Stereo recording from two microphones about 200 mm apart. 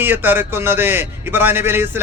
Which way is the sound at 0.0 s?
10° right (ahead or behind).